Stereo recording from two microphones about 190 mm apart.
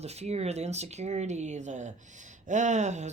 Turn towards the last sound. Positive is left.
turn(degrees=-40)  # may be behind; listen again after turning